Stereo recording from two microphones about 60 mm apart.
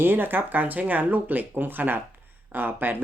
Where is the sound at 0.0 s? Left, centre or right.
Right.